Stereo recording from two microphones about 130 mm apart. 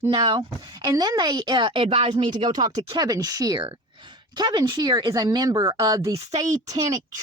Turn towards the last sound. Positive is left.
turn(degrees=-30)  # may be behind; listen again after turning